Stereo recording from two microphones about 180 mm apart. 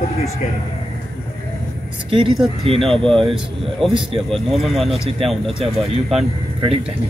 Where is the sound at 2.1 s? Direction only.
30° right (ahead or behind).